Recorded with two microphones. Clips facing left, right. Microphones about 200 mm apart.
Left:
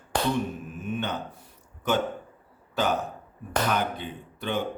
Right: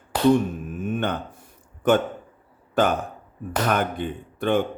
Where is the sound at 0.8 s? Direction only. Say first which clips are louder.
Right 5 dB; 50° right (ahead or behind).